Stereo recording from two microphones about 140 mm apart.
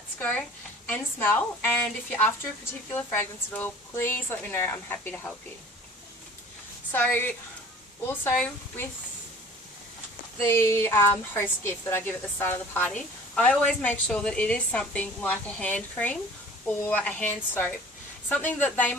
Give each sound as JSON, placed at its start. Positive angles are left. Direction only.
{"t": 0.2, "sound": "a woman's voice", "side_deg": 10}
{"t": 6.9, "sound": "a woman's voice", "side_deg": 15}
{"t": 10.4, "sound": "a woman's voice", "side_deg": 20}